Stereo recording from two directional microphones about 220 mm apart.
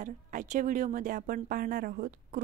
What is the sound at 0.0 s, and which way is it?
A woman's voice, 35° right (ahead or behind).